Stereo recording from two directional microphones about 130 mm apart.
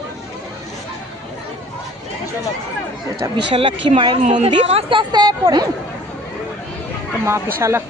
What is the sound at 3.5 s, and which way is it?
Speech, 45° right (ahead or behind).